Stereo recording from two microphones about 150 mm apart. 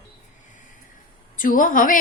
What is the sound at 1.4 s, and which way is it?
Speech, 65° left (ahead or behind).